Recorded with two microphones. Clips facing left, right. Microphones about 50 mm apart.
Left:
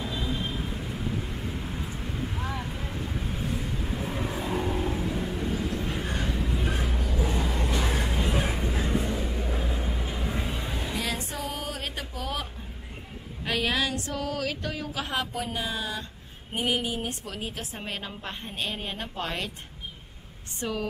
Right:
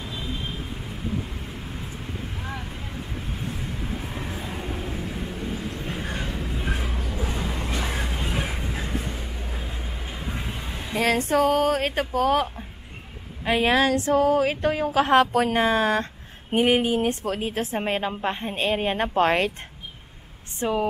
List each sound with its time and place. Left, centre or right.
0.0 s vehicle: centre
5.9 s vehicle: right
6.2 s a sound: centre
7.0 s a sound: right
7.2 s vehicle: centre
11.0 s speech: right
13.7 s speech: right
20.6 s speech: right